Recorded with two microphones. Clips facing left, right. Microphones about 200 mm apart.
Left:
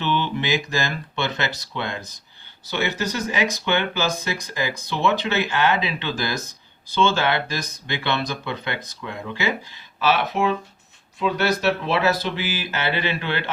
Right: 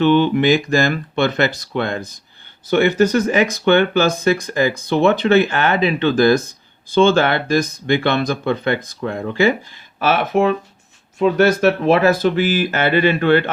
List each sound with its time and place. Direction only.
0.0 s speech: 50° right (ahead or behind)